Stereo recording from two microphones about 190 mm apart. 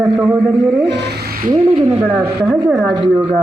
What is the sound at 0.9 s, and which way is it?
Speech, 60° right (ahead or behind).